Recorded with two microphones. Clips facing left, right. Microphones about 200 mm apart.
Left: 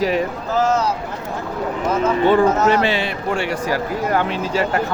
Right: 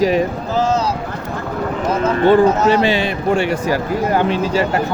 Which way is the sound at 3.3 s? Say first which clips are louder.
Right 5 dB; 20° right (ahead or behind).